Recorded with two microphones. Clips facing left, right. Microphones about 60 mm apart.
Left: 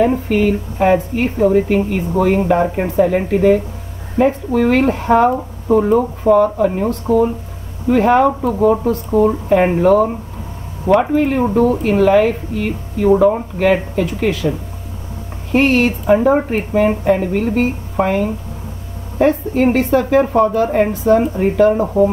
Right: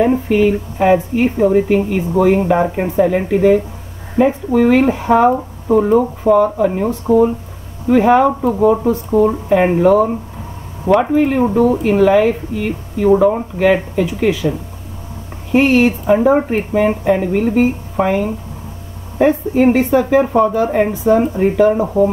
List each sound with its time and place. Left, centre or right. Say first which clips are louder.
0.1 s speech: right 2 dB; centre
11.1 s speech: right 1 dB; centre
15.5 s speech: right 2 dB; centre